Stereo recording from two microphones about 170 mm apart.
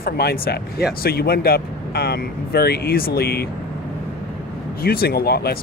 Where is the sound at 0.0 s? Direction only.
65° left (ahead or behind).